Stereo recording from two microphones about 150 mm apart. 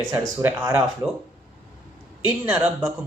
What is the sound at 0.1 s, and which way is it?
Speech, 15° right (ahead or behind).